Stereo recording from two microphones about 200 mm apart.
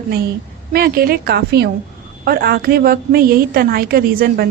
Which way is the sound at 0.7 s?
45° right (ahead or behind).